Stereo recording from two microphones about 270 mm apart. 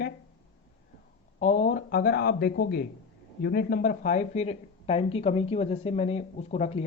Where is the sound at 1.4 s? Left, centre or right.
Left.